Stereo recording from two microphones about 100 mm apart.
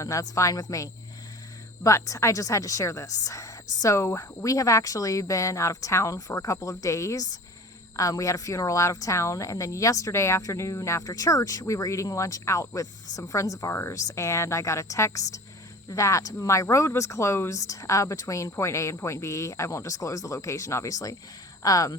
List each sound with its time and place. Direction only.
0.0 s speech: 35° left (ahead or behind)